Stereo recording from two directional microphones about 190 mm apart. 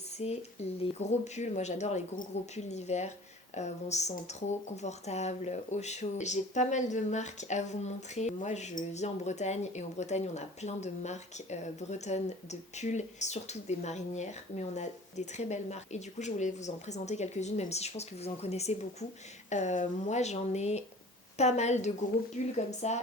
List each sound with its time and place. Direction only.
0.2 s speech: 35° left (ahead or behind)